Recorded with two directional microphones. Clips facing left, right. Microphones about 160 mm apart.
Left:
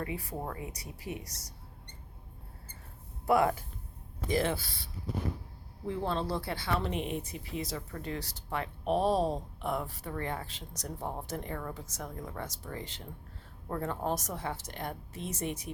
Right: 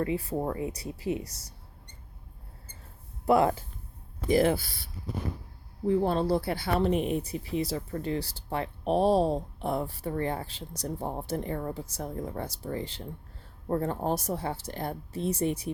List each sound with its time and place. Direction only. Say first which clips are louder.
0.0 s speech: right 8 dB; 25° right (ahead or behind)
3.2 s speech: right 3 dB; 25° right (ahead or behind)
5.8 s speech: right 8 dB; 40° right (ahead or behind)